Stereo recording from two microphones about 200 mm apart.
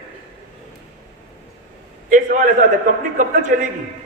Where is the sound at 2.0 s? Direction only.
40° right (ahead or behind).